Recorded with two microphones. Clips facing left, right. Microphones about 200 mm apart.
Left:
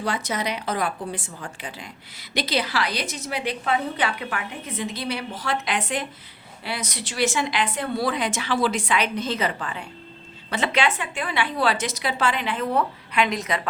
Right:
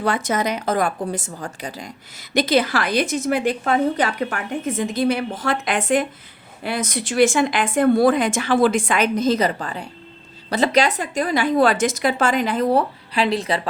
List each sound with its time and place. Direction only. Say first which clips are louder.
0.0 s a woman's voice: right 5 dB; 55° right (ahead or behind); by 13.6 s 30° right (ahead or behind)